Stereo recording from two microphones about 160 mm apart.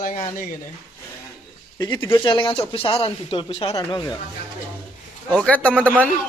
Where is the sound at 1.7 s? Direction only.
20° left (ahead or behind).